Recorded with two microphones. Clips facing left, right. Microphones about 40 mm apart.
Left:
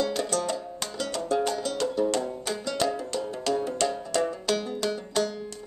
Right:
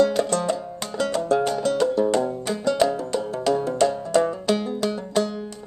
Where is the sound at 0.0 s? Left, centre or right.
Right.